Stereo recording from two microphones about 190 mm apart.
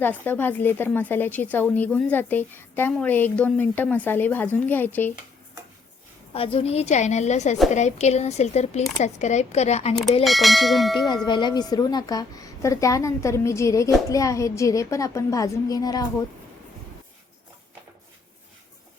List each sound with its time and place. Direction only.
0.0 s speech: 10° left (ahead or behind)
6.3 s a woman's voice: 30° left (ahead or behind)
10.2 s church bell: centre (ahead or behind)
11.3 s speech: 25° left (ahead or behind)